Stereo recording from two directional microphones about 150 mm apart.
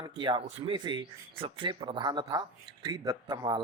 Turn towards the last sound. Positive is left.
turn(degrees=-25)  # may be behind; listen again after turning